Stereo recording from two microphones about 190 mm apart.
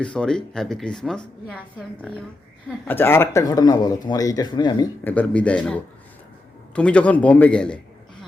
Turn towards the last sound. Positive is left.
turn(degrees=5)  # may be behind; listen again after turning